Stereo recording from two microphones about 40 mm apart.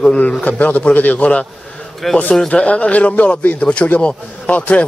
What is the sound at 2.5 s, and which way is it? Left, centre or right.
A man's voice, left.